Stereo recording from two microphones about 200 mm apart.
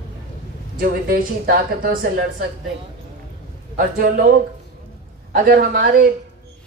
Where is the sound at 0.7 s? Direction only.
45° right (ahead or behind).